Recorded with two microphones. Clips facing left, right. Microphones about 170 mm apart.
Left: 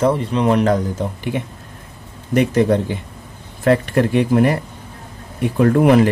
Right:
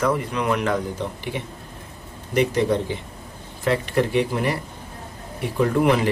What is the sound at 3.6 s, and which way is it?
Speech, 50° left (ahead or behind).